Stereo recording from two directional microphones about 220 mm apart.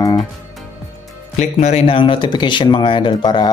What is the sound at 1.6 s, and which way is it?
Speech, 25° left (ahead or behind).